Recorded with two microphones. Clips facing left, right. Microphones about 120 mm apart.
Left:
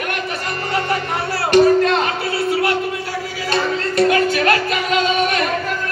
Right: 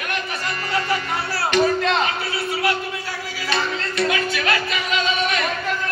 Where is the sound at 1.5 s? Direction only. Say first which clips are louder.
Left 7 dB; 45° left (ahead or behind).